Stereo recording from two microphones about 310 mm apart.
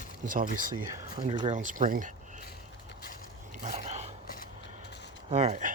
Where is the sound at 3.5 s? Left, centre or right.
Right.